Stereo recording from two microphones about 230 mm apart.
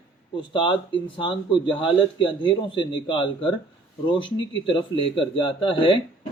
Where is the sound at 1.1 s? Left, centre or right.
Left.